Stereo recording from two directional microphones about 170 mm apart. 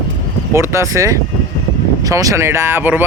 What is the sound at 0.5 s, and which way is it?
Speech, 15° right (ahead or behind).